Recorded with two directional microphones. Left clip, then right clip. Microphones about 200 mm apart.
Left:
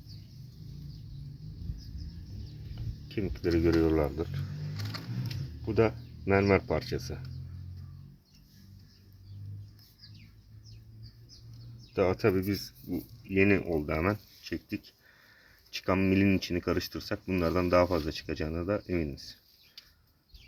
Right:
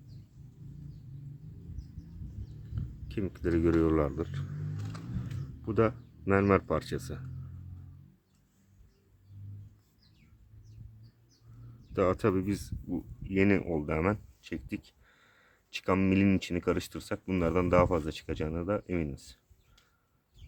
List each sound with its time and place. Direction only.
3.1 s speech: 15° right (ahead or behind)
5.6 s speech: 15° right (ahead or behind)
11.9 s speech: 15° right (ahead or behind)